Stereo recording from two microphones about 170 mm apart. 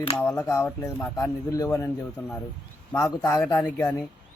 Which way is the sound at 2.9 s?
20° left (ahead or behind).